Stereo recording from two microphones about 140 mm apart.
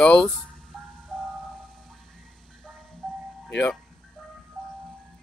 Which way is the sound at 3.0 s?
5° left (ahead or behind).